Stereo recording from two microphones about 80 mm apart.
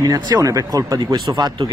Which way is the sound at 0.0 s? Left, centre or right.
Right.